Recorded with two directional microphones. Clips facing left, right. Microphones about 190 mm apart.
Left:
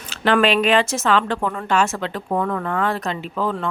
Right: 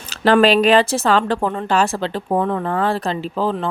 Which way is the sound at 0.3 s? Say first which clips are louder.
Right 4 dB; 35° right (ahead or behind).